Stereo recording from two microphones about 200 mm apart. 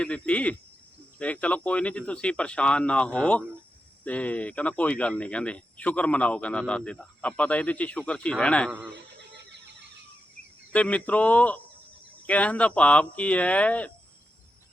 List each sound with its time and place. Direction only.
0.0 s speech: 5° left (ahead or behind)
9.3 s neigh: 60° right (ahead or behind)
10.7 s speech: 5° left (ahead or behind)